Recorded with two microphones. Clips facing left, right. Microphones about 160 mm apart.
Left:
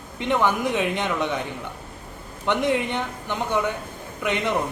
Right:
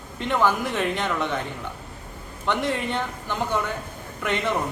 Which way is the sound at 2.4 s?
15° left (ahead or behind).